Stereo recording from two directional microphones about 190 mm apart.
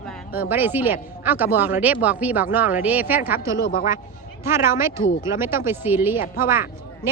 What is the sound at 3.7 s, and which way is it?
Speech, 50° left (ahead or behind).